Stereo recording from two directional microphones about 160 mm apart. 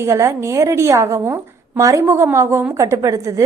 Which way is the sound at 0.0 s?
20° right (ahead or behind).